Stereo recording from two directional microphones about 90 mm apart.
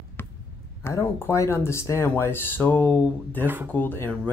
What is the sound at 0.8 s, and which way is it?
Speech, 30° left (ahead or behind).